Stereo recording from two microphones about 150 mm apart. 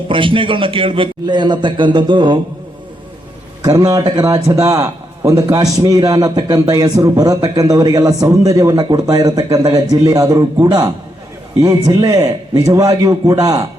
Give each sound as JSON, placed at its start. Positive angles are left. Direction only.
{"t": 0.1, "sound": "a man's voice", "side_deg": -35}
{"t": 3.6, "sound": "a man's voice", "side_deg": -25}